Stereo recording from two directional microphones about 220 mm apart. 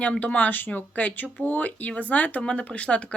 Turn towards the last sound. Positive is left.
turn(degrees=5)  # may be behind; listen again after turning